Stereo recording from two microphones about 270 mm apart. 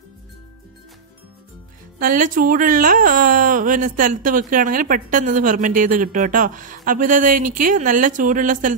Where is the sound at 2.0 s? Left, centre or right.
Right.